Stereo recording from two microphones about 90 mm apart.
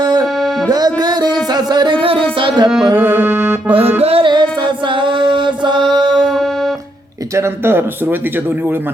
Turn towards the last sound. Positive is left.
turn(degrees=-25)  # may be behind; listen again after turning